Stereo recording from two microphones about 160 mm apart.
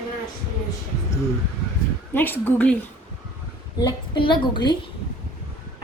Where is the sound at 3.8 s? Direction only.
30° left (ahead or behind).